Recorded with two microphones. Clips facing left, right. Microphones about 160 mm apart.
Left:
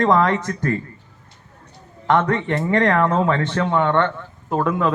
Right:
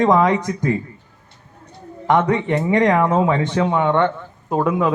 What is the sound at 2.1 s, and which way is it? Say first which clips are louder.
Speech: right 2 dB; 15° right (ahead or behind).